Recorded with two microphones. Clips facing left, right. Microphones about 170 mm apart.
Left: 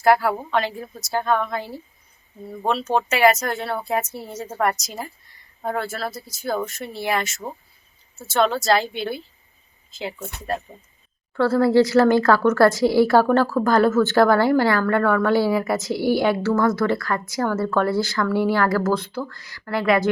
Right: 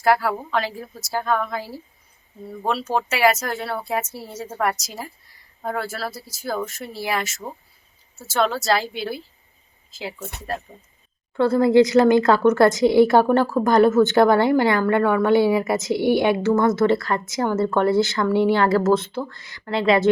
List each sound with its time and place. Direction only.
0.0 s a woman's voice: centre (ahead or behind)
11.3 s a woman's voice: 15° right (ahead or behind)